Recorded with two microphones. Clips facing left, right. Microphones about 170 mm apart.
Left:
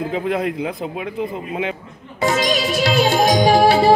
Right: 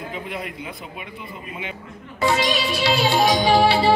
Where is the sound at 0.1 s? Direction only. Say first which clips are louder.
Left 10 dB; 90° left.